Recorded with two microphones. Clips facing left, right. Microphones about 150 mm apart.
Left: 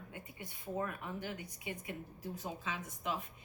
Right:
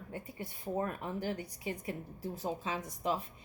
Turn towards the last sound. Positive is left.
turn(degrees=-35)  # may be behind; listen again after turning